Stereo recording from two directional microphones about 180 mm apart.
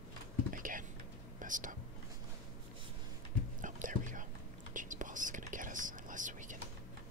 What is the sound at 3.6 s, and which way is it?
Whispering, 45° right (ahead or behind).